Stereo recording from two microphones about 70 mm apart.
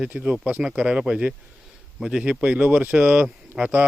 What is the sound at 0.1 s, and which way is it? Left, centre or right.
Speech, right.